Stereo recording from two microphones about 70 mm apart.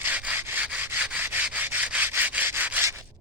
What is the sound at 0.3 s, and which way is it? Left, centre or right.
Rub, right.